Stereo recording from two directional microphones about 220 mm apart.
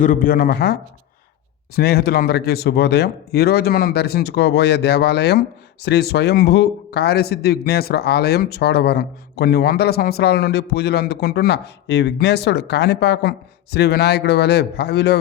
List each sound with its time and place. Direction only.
0.0 s a man's voice: 40° left (ahead or behind)